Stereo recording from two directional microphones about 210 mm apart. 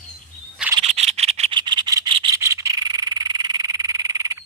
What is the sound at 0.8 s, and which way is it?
Frog, 30° right (ahead or behind).